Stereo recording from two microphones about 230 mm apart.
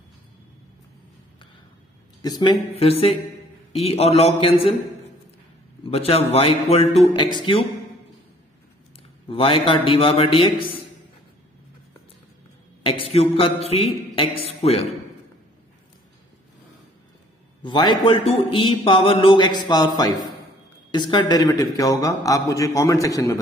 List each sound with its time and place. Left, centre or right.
2.2 s a man's voice: centre
5.9 s a man's voice: left
9.3 s a man's voice: left
12.8 s a man's voice: left
17.6 s a man's voice: centre
20.9 s a man's voice: centre